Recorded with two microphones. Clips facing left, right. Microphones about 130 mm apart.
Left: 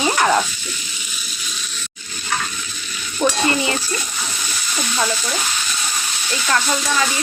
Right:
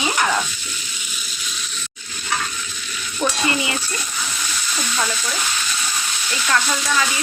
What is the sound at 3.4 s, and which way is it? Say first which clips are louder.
Speech: left 3 dB; 35° left (ahead or behind).